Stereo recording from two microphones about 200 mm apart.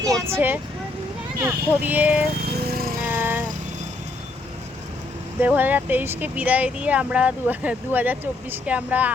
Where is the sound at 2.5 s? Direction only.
50° right (ahead or behind).